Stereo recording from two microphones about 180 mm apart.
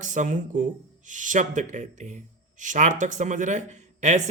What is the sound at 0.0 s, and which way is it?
Speech, 45° right (ahead or behind).